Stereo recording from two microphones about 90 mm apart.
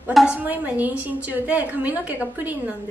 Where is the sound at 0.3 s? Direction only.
20° right (ahead or behind).